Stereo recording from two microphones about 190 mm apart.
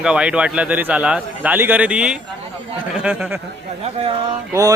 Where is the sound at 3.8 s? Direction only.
30° right (ahead or behind).